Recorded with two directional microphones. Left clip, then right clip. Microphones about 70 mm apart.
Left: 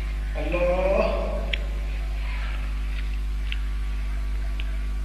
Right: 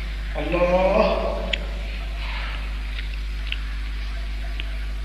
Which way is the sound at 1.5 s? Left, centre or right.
Left.